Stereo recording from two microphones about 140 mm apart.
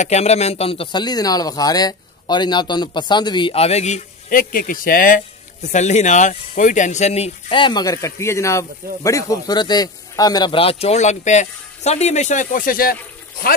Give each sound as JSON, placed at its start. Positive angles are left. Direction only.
{"t": 0.0, "sound": "speech", "side_deg": 50}
{"t": 4.3, "sound": "speech", "side_deg": 85}
{"t": 10.5, "sound": "speech", "side_deg": 40}